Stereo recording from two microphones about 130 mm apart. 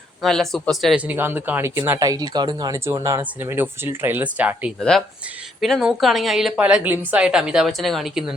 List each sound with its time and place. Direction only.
0.2 s speech: 5° left (ahead or behind)
1.0 s speech: 15° right (ahead or behind)
2.0 s speech: 30° right (ahead or behind); by 4.7 s 10° right (ahead or behind)
4.8 s speech: 5° left (ahead or behind)